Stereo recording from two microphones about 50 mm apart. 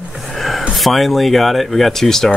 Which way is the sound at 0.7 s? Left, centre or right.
Centre.